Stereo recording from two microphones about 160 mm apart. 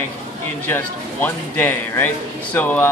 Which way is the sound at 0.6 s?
15° left (ahead or behind).